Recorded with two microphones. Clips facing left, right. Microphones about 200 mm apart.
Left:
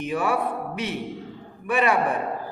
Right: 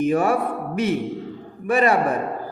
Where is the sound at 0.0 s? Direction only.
45° right (ahead or behind).